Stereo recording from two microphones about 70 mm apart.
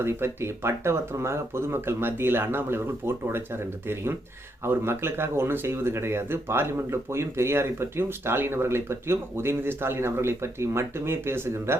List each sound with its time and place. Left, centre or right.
0.0 s speech: right